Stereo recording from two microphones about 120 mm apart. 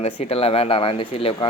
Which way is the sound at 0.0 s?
55° left (ahead or behind).